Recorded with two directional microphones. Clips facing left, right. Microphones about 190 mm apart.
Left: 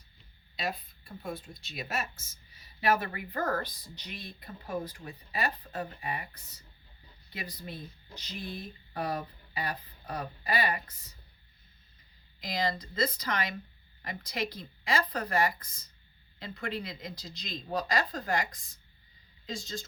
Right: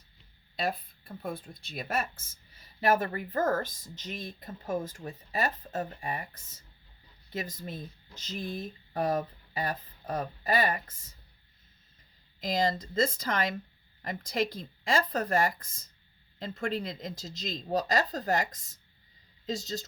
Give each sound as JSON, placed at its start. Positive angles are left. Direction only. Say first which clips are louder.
{"t": 0.5, "sound": "speech", "louder": "right 4 dB", "side_deg": -55}
{"t": 12.4, "sound": "speech", "louder": "right 4 dB", "side_deg": -45}